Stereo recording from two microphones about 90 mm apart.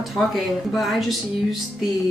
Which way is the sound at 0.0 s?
Centre (ahead or behind).